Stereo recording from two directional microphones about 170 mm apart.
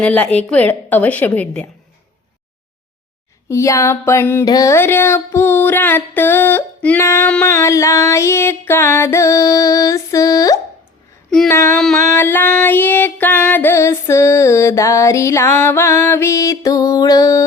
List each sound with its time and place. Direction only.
0.0 s female singing: 10° left (ahead or behind)
3.5 s female singing: 20° left (ahead or behind)